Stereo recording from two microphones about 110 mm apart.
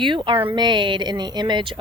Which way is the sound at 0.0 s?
50° right (ahead or behind).